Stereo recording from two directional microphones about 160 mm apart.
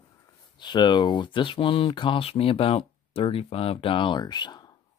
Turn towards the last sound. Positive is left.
turn(degrees=25)  # may be behind; listen again after turning